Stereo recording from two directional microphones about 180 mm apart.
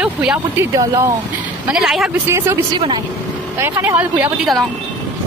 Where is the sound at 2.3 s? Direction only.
15° right (ahead or behind).